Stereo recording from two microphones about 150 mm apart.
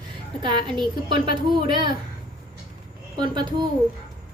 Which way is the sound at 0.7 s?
35° right (ahead or behind).